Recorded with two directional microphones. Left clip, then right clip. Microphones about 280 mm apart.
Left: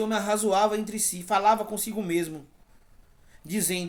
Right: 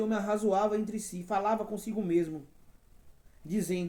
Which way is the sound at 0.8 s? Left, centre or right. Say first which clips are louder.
Left 6 dB; centre.